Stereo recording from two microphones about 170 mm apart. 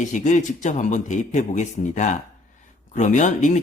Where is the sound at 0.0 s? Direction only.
45° left (ahead or behind).